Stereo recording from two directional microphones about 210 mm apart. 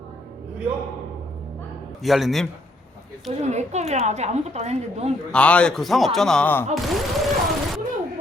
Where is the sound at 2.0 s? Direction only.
Centre (ahead or behind).